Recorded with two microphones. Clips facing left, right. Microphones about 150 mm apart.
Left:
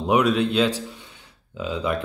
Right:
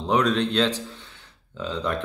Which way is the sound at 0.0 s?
10° left (ahead or behind).